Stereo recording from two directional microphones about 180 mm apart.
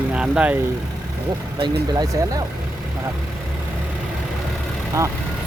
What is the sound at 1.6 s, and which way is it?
Speech, 20° right (ahead or behind).